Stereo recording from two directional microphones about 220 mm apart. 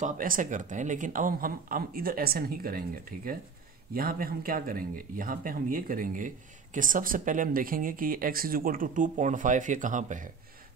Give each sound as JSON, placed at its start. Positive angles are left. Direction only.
{"t": 0.0, "sound": "speech", "side_deg": -35}